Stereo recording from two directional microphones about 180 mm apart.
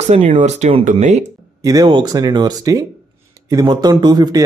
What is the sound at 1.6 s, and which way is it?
Speech, 20° right (ahead or behind).